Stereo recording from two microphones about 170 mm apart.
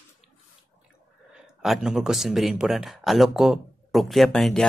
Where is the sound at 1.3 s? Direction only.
Centre (ahead or behind).